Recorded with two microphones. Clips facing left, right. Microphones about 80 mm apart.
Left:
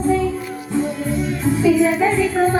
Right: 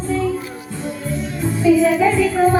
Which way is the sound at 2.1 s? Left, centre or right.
Centre.